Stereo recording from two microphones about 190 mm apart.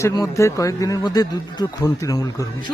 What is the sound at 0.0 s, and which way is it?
A man's voice, 15° left (ahead or behind).